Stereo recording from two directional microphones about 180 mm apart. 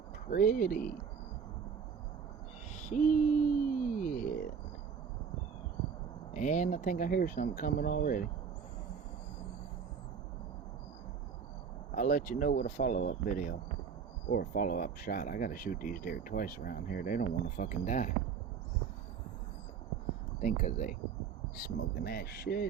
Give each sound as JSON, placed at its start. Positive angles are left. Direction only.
{"t": 0.3, "sound": "speech", "side_deg": 50}
{"t": 2.7, "sound": "a sound", "side_deg": 45}
{"t": 6.3, "sound": "speech", "side_deg": 45}
{"t": 11.9, "sound": "speech", "side_deg": 50}
{"t": 20.4, "sound": "speech", "side_deg": 45}